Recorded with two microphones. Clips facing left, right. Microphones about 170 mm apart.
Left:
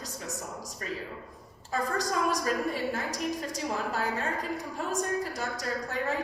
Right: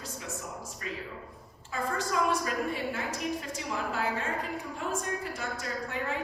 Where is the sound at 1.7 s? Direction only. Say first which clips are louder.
Left 1 dB; 40° left (ahead or behind).